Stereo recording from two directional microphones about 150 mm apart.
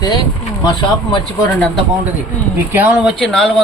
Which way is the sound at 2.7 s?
5° right (ahead or behind).